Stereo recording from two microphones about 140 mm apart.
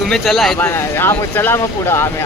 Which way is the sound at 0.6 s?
15° left (ahead or behind).